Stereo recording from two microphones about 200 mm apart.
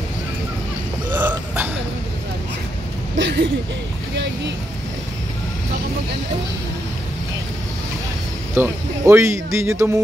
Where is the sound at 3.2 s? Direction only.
65° right (ahead or behind).